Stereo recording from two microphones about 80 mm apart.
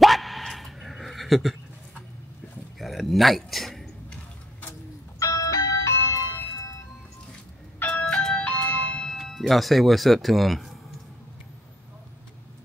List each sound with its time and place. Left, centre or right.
0.0 s dog: centre
2.8 s a sound: centre
5.2 s music: left
8.0 s music: centre